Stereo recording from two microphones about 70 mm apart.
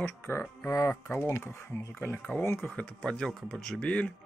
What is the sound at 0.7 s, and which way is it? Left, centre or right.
Speech, left.